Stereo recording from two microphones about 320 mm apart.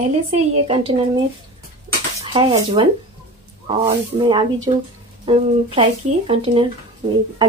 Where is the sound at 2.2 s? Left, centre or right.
Centre.